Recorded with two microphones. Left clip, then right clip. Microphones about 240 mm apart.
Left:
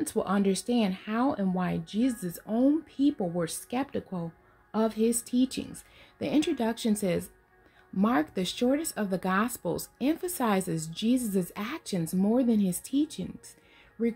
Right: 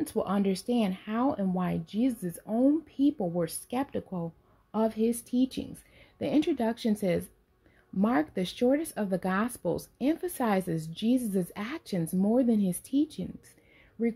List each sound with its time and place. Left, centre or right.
0.0 s speech: centre